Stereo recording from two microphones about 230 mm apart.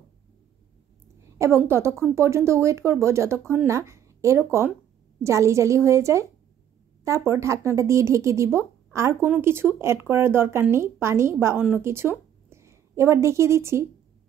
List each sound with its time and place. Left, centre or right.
1.4 s speech: centre